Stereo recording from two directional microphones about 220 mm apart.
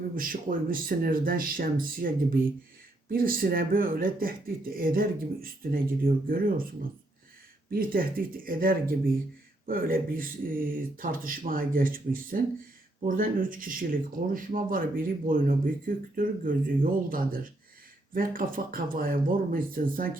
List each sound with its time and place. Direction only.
0.2 s speech: 40° right (ahead or behind)
7.7 s speech: 40° right (ahead or behind)